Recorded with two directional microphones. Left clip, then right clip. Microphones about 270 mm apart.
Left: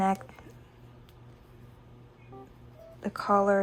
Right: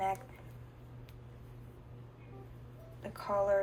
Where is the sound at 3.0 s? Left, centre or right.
Left.